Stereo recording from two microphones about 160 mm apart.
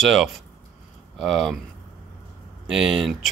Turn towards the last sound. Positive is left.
turn(degrees=0)  # may be behind; listen again after turning